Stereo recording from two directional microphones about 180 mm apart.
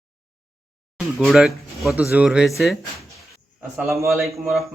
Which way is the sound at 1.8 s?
5° right (ahead or behind).